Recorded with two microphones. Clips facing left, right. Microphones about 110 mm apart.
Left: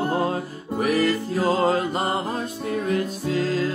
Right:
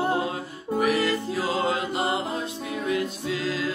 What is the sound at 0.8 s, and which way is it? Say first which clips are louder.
Music: left 3 dB; 35° left (ahead or behind).